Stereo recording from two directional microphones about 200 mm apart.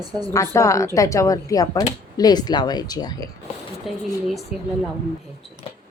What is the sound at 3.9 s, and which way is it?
Speech, centre (ahead or behind).